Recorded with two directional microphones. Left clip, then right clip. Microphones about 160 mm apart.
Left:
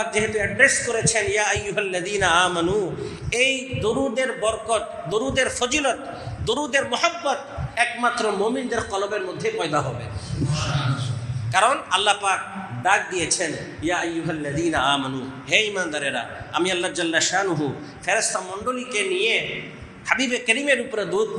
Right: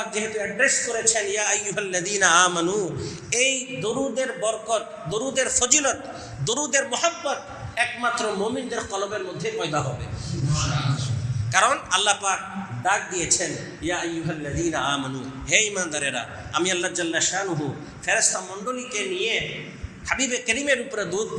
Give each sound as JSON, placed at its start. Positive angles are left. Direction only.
{"t": 0.1, "sound": "a man's voice", "side_deg": -10}
{"t": 11.5, "sound": "a man's voice", "side_deg": -25}
{"t": 15.4, "sound": "a man's voice", "side_deg": -25}
{"t": 16.6, "sound": "a man's voice", "side_deg": -15}
{"t": 16.9, "sound": "a man's voice", "side_deg": 0}
{"t": 18.0, "sound": "a man's voice", "side_deg": -15}
{"t": 20.1, "sound": "a man's voice", "side_deg": -15}